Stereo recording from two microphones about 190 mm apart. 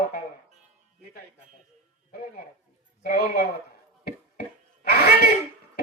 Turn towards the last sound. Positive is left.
turn(degrees=55)  # may be behind; listen again after turning